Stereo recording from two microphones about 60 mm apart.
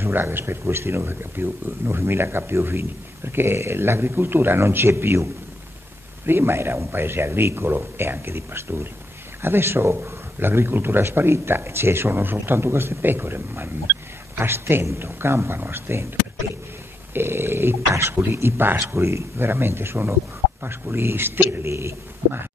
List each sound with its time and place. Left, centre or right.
0.0 s speech: right
17.1 s speech: right
18.8 s speech: right
21.6 s speech: right